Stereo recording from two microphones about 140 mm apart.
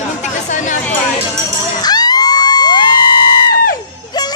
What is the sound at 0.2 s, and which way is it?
Chatter, 60° left (ahead or behind).